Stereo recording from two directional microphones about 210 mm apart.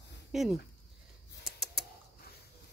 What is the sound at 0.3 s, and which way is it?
Speech, centre (ahead or behind).